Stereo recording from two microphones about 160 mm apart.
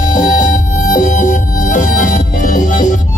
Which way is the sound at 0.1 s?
55° left (ahead or behind).